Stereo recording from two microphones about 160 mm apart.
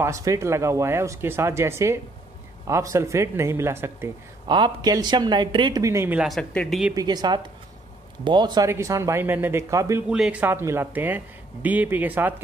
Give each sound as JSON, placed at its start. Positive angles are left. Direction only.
{"t": 0.0, "sound": "speech", "side_deg": -20}
{"t": 4.5, "sound": "speech", "side_deg": -25}
{"t": 6.2, "sound": "speech", "side_deg": 5}
{"t": 6.9, "sound": "speech", "side_deg": -25}
{"t": 10.0, "sound": "speech", "side_deg": -5}